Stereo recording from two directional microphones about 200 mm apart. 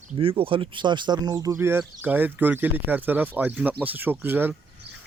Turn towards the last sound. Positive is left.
turn(degrees=-10)  # may be behind; listen again after turning